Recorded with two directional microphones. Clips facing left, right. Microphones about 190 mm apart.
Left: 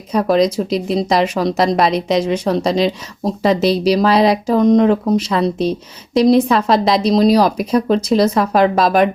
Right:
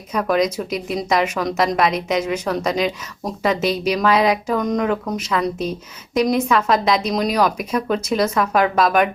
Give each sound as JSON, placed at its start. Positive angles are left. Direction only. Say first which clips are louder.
{"t": 0.1, "sound": "speech", "louder": "left 5 dB", "side_deg": 35}